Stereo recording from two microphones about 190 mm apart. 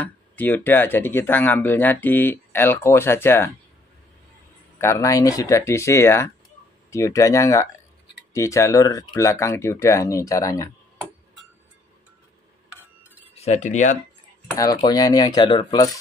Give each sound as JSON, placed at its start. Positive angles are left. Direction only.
{"t": 0.0, "sound": "speech", "side_deg": 10}
{"t": 4.7, "sound": "speech", "side_deg": 15}
{"t": 13.3, "sound": "speech", "side_deg": 35}
{"t": 14.5, "sound": "speech", "side_deg": 20}